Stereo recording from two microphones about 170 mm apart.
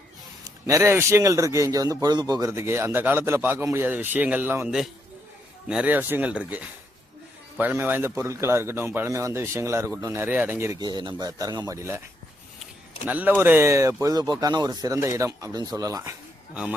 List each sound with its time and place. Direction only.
0.4 s speech: 20° right (ahead or behind)
13.1 s speech: 10° right (ahead or behind)